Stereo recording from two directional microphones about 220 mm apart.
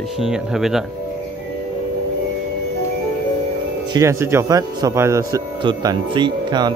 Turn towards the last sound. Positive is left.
turn(degrees=-20)  # may be behind; listen again after turning